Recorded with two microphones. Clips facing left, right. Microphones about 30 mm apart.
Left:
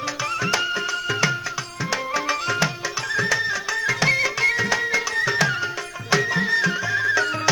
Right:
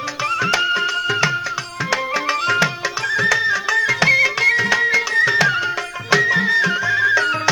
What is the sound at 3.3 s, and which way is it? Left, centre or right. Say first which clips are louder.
Music: right 6 dB; right.